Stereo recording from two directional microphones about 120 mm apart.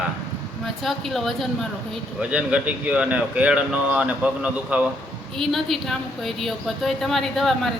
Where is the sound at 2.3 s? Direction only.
10° right (ahead or behind).